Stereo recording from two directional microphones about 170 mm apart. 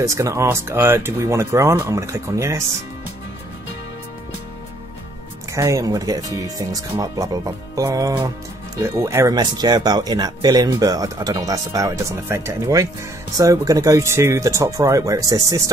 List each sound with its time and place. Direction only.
0.0 s speech: 20° right (ahead or behind)
5.5 s speech: 20° right (ahead or behind)